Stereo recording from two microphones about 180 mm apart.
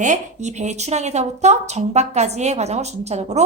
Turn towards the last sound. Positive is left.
turn(degrees=-40)  # may be behind; listen again after turning